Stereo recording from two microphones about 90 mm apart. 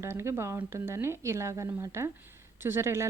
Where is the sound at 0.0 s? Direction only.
30° right (ahead or behind).